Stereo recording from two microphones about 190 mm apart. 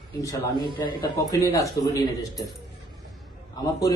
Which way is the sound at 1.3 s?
15° left (ahead or behind).